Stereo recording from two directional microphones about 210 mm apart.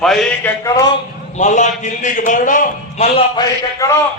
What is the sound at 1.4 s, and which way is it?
A man's voice, 35° left (ahead or behind).